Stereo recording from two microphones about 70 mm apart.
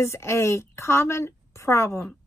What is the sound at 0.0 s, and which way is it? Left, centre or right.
A woman's voice, left.